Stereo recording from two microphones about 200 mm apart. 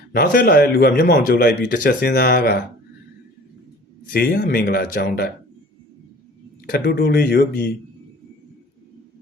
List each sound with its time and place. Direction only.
0.1 s speech: 45° left (ahead or behind)
4.1 s speech: 50° left (ahead or behind)
6.7 s speech: 50° left (ahead or behind)